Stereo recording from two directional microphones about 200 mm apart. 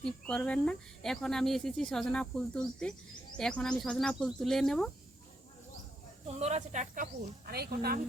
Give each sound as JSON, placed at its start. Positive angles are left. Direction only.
{"t": 0.0, "sound": "speech", "side_deg": 5}
{"t": 6.2, "sound": "speech", "side_deg": -35}